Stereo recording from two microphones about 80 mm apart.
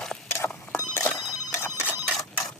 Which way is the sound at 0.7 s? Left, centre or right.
Left.